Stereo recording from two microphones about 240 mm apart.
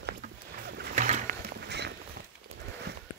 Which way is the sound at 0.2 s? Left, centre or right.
Right.